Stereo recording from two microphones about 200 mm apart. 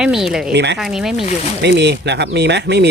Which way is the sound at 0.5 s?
60° right (ahead or behind).